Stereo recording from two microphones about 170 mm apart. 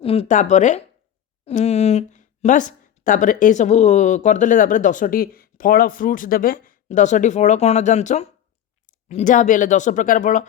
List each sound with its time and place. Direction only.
0.0 s a woman's voice: 35° left (ahead or behind)